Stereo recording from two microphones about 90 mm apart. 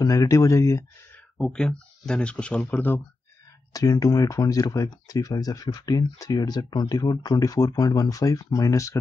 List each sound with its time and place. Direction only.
0.0 s speech: 40° left (ahead or behind)
1.4 s speech: 5° left (ahead or behind)
3.7 s speech: 40° left (ahead or behind)